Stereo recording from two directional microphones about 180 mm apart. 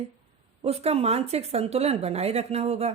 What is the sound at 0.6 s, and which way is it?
Speech, 35° right (ahead or behind).